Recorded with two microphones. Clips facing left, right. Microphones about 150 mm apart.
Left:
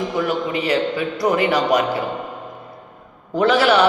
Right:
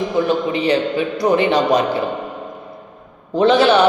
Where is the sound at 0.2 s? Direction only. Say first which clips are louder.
Right 5 dB; 25° right (ahead or behind).